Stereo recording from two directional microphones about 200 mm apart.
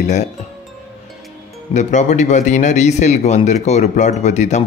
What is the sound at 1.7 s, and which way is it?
Speech, 35° left (ahead or behind).